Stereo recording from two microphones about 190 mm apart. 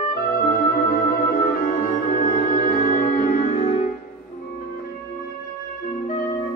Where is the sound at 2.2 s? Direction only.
45° left (ahead or behind).